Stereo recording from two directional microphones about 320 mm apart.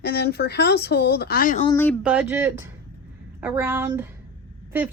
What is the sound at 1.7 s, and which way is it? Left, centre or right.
A woman's voice, centre.